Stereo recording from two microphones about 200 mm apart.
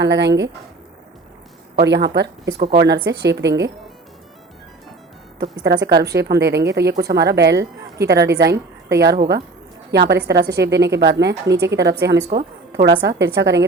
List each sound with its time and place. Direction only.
0.0 s a woman's voice: 60° right (ahead or behind)
1.8 s a woman's voice: 60° right (ahead or behind)
5.4 s a woman's voice: 60° right (ahead or behind)